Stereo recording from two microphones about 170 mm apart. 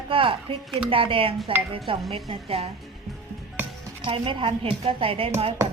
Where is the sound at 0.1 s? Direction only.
30° right (ahead or behind).